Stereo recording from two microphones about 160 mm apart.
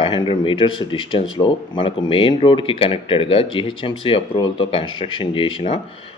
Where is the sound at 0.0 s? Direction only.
30° left (ahead or behind).